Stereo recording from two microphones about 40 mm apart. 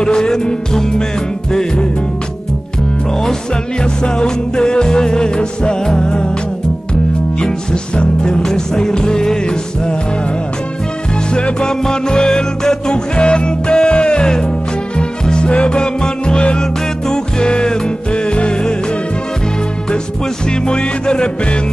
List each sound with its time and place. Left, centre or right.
0.0 s music: centre
3.8 s music: centre
7.7 s music: left
11.3 s music: left
20.4 s music: left